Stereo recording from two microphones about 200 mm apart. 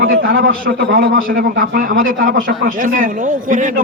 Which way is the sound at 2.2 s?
45° right (ahead or behind).